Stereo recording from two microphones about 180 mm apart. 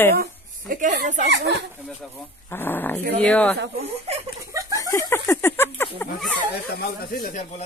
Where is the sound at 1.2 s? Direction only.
70° right (ahead or behind).